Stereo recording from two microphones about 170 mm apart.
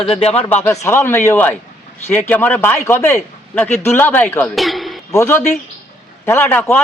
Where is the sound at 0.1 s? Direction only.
40° left (ahead or behind).